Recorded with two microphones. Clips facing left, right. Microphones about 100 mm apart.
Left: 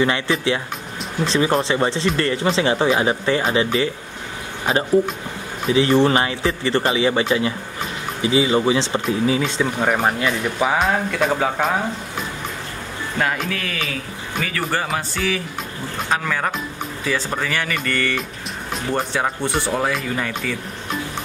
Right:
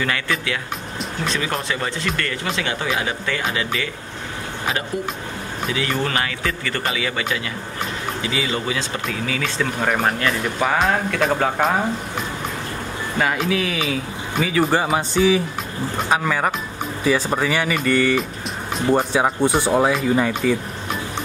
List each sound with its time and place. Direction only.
0.0 s speech: 25° left (ahead or behind)
9.4 s speech: 10° left (ahead or behind)
13.2 s speech: centre (ahead or behind); by 20.5 s 20° right (ahead or behind)